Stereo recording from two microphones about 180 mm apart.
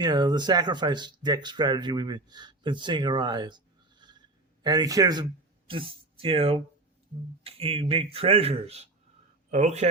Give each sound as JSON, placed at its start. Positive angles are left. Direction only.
{"t": 0.0, "sound": "speech", "side_deg": -25}